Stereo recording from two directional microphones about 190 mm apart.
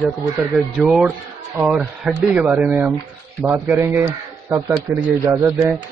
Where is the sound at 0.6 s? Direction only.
Centre (ahead or behind).